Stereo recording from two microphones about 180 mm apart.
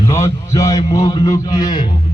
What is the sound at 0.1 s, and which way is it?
Mantra, 15° left (ahead or behind).